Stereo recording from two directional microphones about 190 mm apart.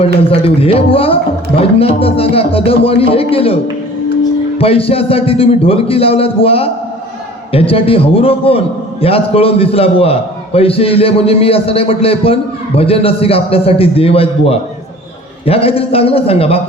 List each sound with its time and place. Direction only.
0.0 s a man's voice: 30° left (ahead or behind)